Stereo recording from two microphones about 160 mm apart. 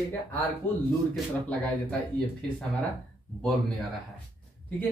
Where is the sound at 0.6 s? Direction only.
15° left (ahead or behind).